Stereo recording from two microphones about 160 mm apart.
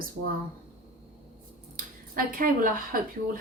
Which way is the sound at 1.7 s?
65° right (ahead or behind).